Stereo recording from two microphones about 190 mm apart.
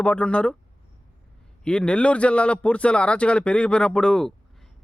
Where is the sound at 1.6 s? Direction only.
5° left (ahead or behind).